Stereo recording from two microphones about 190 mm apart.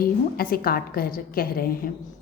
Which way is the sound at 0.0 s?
50° left (ahead or behind).